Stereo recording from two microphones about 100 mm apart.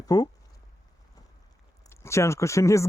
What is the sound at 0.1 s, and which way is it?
Speech, 40° left (ahead or behind).